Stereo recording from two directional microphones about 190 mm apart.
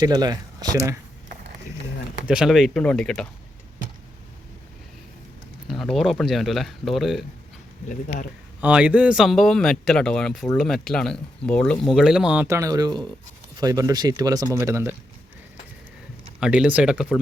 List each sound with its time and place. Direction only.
0.0 s speech: 20° right (ahead or behind)
2.2 s speech: 5° right (ahead or behind)
5.6 s speech: centre (ahead or behind)
7.9 s speech: 45° left (ahead or behind)
8.6 s speech: 5° right (ahead or behind)
16.4 s speech: 5° right (ahead or behind)